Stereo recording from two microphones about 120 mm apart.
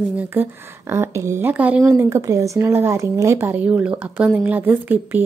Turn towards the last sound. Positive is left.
turn(degrees=-15)  # may be behind; listen again after turning